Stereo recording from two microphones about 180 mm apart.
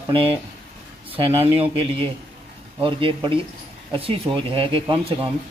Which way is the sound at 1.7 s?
30° right (ahead or behind).